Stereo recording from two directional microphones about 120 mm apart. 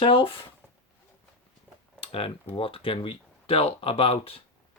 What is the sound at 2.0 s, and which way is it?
Speech, 50° left (ahead or behind).